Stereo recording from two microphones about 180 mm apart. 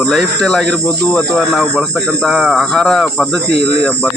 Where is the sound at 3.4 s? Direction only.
70° right (ahead or behind).